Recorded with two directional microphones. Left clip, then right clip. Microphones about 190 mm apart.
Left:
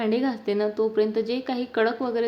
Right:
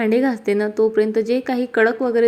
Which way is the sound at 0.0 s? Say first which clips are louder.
Right 7 dB; 25° right (ahead or behind).